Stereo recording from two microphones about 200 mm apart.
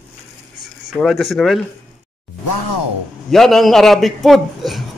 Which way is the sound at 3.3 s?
Centre (ahead or behind).